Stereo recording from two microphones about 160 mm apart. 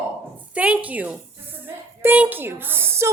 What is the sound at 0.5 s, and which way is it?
A woman's voice, 10° right (ahead or behind).